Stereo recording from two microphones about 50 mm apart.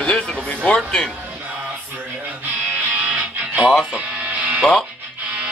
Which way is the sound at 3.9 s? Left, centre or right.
Right.